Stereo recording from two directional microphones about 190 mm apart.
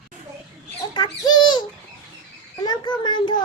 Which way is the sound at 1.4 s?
25° left (ahead or behind).